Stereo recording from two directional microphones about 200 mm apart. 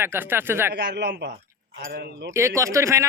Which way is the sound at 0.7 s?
55° right (ahead or behind).